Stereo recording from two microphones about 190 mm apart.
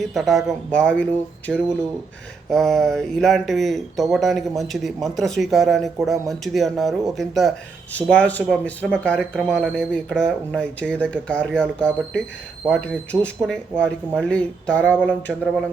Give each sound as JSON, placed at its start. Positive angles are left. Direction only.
{"t": 0.0, "sound": "speech", "side_deg": 0}
{"t": 15.3, "sound": "speech", "side_deg": -5}